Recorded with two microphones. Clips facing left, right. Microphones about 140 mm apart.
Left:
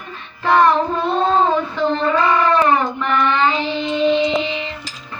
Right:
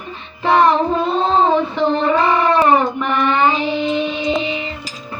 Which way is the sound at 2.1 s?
30° right (ahead or behind).